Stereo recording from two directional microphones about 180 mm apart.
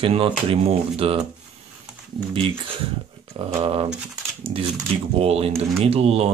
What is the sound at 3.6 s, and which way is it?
Speech, 35° right (ahead or behind).